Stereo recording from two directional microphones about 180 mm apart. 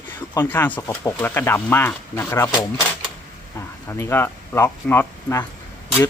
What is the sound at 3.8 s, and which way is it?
Speech, 15° left (ahead or behind).